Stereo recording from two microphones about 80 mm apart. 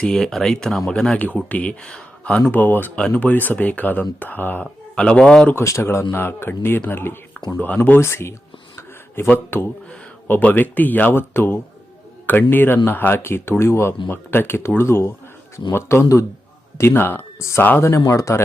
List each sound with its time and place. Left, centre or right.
0.0 s speech: centre
2.5 s speech: left
4.6 s a man's voice: centre
5.5 s speech: left